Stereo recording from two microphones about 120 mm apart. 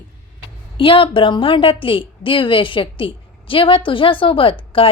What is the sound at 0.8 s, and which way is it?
A woman's voice, 45° left (ahead or behind).